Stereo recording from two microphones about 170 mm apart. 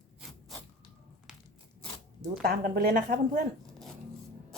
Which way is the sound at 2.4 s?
60° right (ahead or behind).